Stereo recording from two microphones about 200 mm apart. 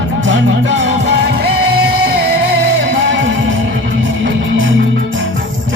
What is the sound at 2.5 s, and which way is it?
Music, 60° right (ahead or behind).